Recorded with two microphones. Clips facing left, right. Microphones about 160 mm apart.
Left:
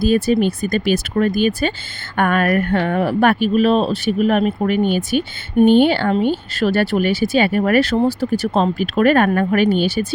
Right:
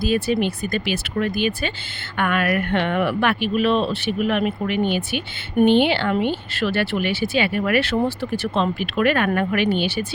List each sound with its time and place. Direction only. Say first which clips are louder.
0.0 s speech: left 5 dB; 45° left (ahead or behind)